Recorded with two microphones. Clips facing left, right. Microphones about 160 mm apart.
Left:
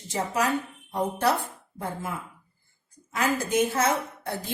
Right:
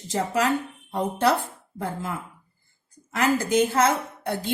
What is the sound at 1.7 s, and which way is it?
A woman's voice, 75° right (ahead or behind).